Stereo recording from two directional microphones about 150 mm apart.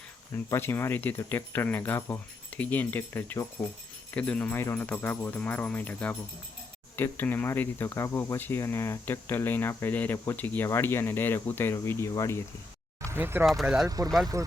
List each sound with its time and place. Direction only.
0.3 s speech: 15° left (ahead or behind)
13.1 s speech: 15° right (ahead or behind)
13.4 s speech: centre (ahead or behind)
13.8 s speech: 25° right (ahead or behind)